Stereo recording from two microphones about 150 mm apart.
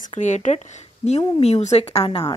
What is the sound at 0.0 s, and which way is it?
Speech, 55° left (ahead or behind).